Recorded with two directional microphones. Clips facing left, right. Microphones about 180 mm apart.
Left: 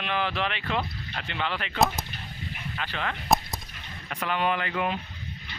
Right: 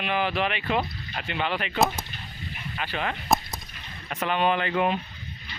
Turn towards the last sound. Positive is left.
turn(degrees=-25)  # may be behind; listen again after turning